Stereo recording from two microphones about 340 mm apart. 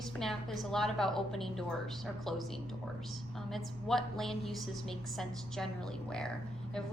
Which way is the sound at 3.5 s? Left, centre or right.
Centre.